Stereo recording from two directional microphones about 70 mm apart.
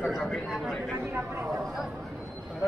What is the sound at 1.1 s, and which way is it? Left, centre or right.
Speech, right.